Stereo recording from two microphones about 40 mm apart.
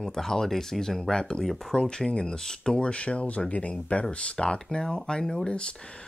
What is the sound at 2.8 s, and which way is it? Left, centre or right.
Speech, left.